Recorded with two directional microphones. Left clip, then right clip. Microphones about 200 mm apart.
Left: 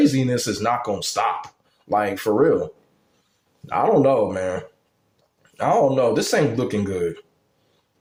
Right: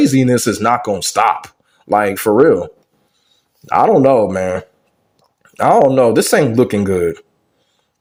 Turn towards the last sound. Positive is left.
turn(degrees=-35)  # may be behind; listen again after turning